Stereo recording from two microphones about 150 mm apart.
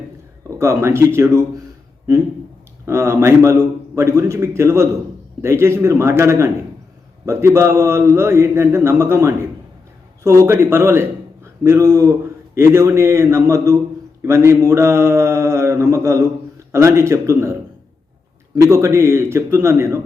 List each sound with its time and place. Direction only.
0.6 s a man's voice: 20° right (ahead or behind)
2.8 s a man's voice: 20° right (ahead or behind)
14.2 s mantra: 20° right (ahead or behind)
18.5 s a man's voice: 20° right (ahead or behind)